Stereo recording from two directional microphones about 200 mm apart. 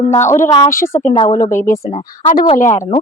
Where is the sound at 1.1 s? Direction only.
20° left (ahead or behind).